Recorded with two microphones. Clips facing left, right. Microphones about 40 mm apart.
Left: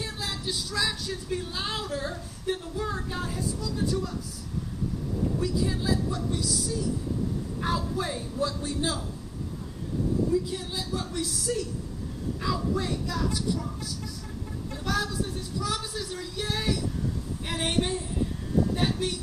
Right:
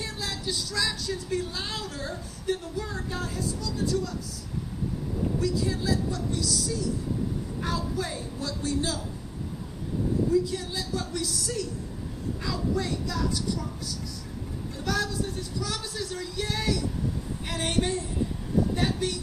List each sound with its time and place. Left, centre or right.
0.0 s a sound: centre
1.1 s speech: centre
5.4 s speech: centre
10.3 s speech: centre